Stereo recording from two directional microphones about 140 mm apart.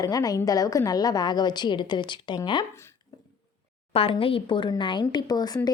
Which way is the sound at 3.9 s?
45° left (ahead or behind).